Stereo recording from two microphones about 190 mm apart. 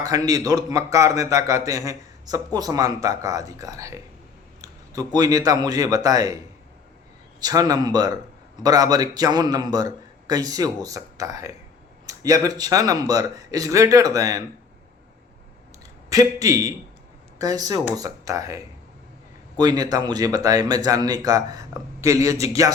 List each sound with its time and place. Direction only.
0.0 s a man's voice: 20° right (ahead or behind)
16.0 s a man's voice: 20° right (ahead or behind)